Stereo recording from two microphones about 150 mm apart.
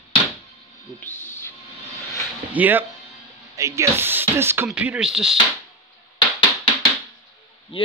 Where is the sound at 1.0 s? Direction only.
15° left (ahead or behind).